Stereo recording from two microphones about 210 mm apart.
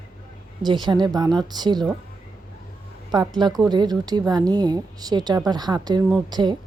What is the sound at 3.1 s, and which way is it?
A woman's voice, 20° right (ahead or behind).